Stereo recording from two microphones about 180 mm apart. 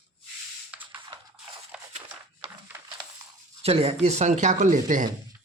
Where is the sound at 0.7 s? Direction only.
10° right (ahead or behind).